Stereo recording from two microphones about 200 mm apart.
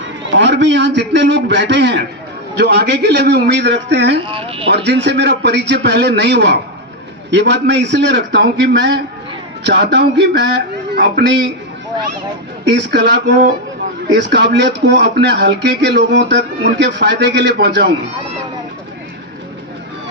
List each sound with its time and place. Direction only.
0.3 s speech: 60° right (ahead or behind)
4.3 s speech: 30° right (ahead or behind)
4.7 s a woman's voice: 60° right (ahead or behind)
12.7 s speech: 60° right (ahead or behind)